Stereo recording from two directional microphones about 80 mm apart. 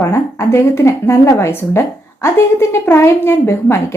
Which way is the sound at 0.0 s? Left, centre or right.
Left.